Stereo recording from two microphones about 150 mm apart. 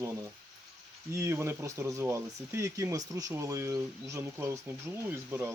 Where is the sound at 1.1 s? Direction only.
15° right (ahead or behind).